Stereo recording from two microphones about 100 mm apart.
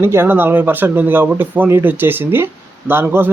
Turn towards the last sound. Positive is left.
turn(degrees=-25)  # may be behind; listen again after turning